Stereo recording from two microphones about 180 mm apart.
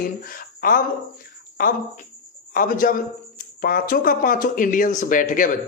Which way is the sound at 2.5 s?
50° left (ahead or behind).